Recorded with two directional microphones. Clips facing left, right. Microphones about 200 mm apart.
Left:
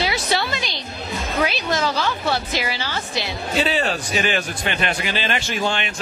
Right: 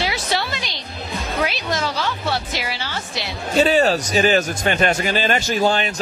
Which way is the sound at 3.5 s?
45° right (ahead or behind).